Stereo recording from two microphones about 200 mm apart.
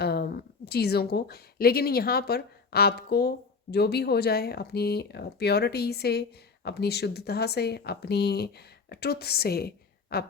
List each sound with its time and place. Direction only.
0.0 s a woman's voice: 55° left (ahead or behind)